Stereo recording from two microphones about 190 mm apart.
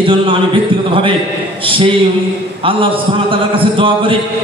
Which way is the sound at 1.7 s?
30° right (ahead or behind).